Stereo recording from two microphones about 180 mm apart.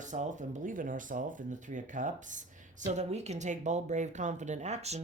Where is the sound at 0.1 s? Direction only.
45° right (ahead or behind).